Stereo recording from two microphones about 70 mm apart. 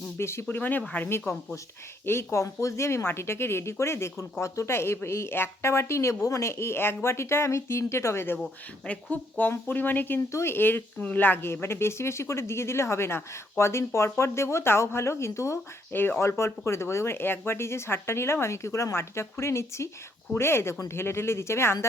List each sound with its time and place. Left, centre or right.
0.2 s speech: left
0.4 s speech: left
1.2 s speech: centre
2.0 s speech: left
9.4 s speech: left
15.9 s speech: left